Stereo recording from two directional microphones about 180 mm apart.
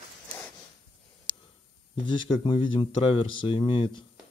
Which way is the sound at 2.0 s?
25° left (ahead or behind).